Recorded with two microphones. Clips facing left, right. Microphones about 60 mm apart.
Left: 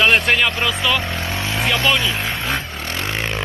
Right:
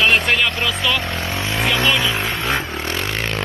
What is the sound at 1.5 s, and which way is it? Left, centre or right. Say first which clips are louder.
Vehicle: even; centre.